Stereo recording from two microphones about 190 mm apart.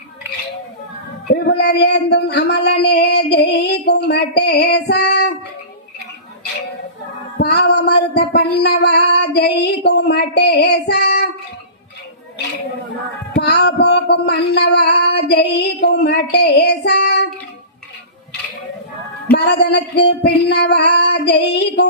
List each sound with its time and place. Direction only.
1.3 s speech: 60° left (ahead or behind)
7.3 s speech: 60° left (ahead or behind)
13.5 s speech: 60° left (ahead or behind)
19.3 s speech: 60° left (ahead or behind)